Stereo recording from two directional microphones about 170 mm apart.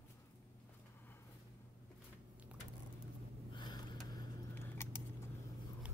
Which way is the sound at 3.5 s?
25° left (ahead or behind).